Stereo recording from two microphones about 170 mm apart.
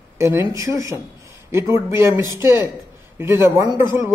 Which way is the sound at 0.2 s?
15° right (ahead or behind).